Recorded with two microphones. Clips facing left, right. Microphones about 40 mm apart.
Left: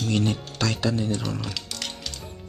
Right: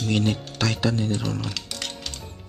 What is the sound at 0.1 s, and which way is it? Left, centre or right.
Speech, right.